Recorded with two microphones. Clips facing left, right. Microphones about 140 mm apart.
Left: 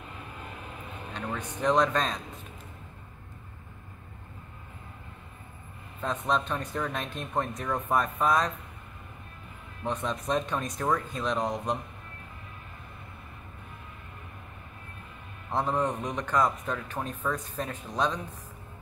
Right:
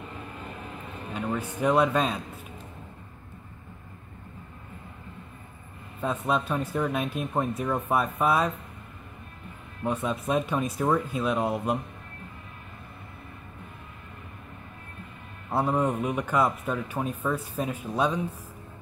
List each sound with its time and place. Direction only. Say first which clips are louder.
1.1 s speech: right 5 dB; 5° right (ahead or behind)
5.9 s speech: right 2 dB; 5° right (ahead or behind)
9.8 s speech: right 3 dB; 5° right (ahead or behind)
15.5 s speech: right 3 dB; 10° right (ahead or behind)